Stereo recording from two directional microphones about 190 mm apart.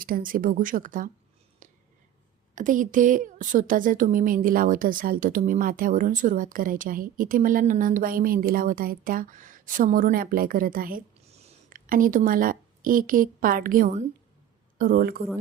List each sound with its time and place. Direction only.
0.0 s speech: 50° right (ahead or behind)
1.6 s a sound: 45° right (ahead or behind)
2.6 s a woman's voice: 45° right (ahead or behind)